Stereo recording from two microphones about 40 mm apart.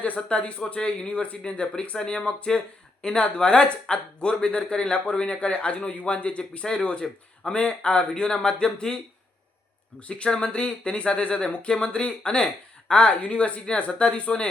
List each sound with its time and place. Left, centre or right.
0.2 s speech: left
7.0 s speech: centre
7.5 s speech: left
10.0 s speech: left
10.2 s speech: left